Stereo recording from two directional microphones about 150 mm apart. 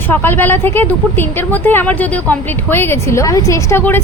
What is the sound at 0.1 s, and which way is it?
A woman's voice, 15° left (ahead or behind).